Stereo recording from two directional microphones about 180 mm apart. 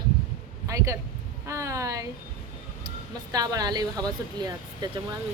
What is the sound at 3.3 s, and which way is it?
Speech, 20° right (ahead or behind).